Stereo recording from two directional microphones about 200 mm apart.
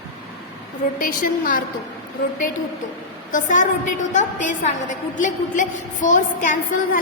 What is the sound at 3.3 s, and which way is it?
A woman's voice, 40° left (ahead or behind).